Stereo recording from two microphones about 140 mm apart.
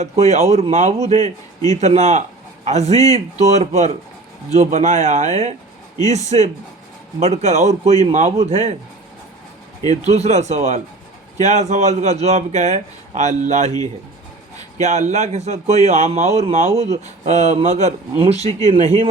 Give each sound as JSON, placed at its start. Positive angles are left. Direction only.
{"t": 0.0, "sound": "a man's voice", "side_deg": -50}
{"t": 6.3, "sound": "speech", "side_deg": -40}
{"t": 7.2, "sound": "a man's voice", "side_deg": -55}
{"t": 10.1, "sound": "a man's voice", "side_deg": -50}
{"t": 14.8, "sound": "a man's voice", "side_deg": -55}